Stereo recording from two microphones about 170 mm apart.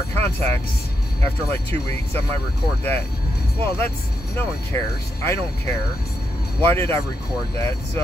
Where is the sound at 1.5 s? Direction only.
15° left (ahead or behind).